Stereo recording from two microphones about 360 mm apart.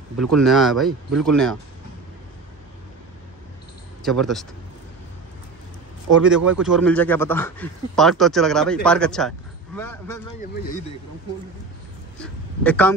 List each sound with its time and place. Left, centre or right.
0.2 s a man's voice: centre
4.0 s a man's voice: centre
6.2 s a man's voice: centre
10.5 s speech: left
12.2 s speech: centre